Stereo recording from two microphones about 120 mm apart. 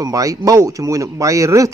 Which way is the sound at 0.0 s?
30° right (ahead or behind).